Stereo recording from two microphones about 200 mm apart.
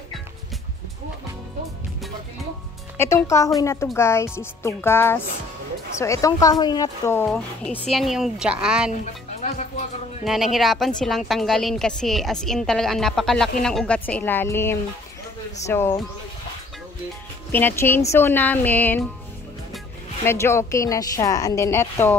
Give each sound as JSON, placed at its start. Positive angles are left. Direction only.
{"t": 3.5, "sound": "a woman's voice", "side_deg": 15}
{"t": 9.0, "sound": "speech", "side_deg": 35}
{"t": 10.2, "sound": "a woman's voice", "side_deg": 0}
{"t": 17.5, "sound": "speech", "side_deg": 10}
{"t": 20.2, "sound": "speech", "side_deg": 15}